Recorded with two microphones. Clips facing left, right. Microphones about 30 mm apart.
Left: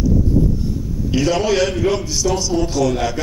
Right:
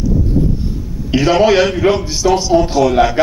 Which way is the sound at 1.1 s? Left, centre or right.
Right.